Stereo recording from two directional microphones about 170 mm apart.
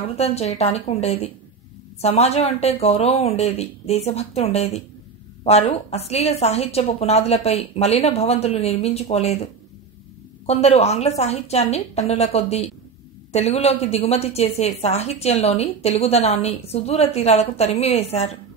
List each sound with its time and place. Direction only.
0.1 s a woman's voice: 40° left (ahead or behind)